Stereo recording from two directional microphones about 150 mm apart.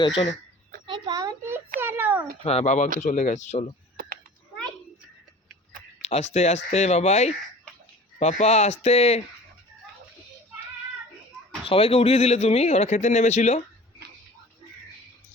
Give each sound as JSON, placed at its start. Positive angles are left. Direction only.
{"t": 0.9, "sound": "a sound", "side_deg": -30}
{"t": 2.4, "sound": "speech", "side_deg": 45}
{"t": 6.0, "sound": "speech", "side_deg": 45}
{"t": 11.6, "sound": "speech", "side_deg": 40}